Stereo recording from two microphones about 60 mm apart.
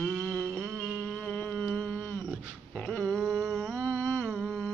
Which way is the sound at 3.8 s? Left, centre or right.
Left.